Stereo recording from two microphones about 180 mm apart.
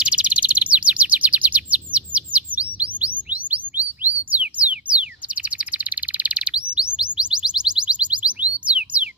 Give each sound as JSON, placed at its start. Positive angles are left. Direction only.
{"t": 0.0, "sound": "chirp", "side_deg": -5}
{"t": 7.2, "sound": "music", "side_deg": -5}